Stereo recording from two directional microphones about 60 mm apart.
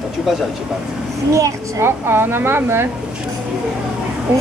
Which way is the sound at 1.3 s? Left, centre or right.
Right.